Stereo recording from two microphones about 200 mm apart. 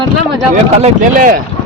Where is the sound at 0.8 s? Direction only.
35° right (ahead or behind).